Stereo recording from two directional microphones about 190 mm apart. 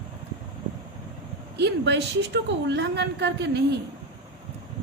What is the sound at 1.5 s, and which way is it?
A woman's voice, 65° right (ahead or behind).